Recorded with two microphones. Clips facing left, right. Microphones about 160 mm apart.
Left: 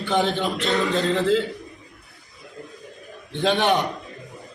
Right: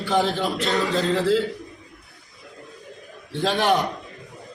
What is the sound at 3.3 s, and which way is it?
Speech, 5° right (ahead or behind).